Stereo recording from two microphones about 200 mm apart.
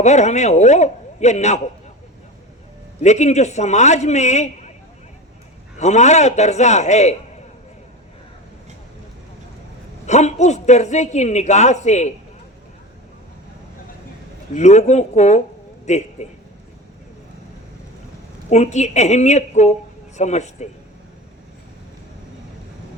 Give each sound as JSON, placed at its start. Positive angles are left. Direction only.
{"t": 0.0, "sound": "a woman's voice", "side_deg": 35}
{"t": 3.0, "sound": "a woman's voice", "side_deg": 35}
{"t": 5.7, "sound": "a woman's voice", "side_deg": 35}
{"t": 10.1, "sound": "a woman's voice", "side_deg": 35}
{"t": 14.5, "sound": "a woman's voice", "side_deg": 35}
{"t": 18.4, "sound": "a woman's voice", "side_deg": 35}